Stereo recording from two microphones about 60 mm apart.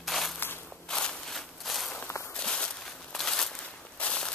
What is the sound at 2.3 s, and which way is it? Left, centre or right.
Walk, centre.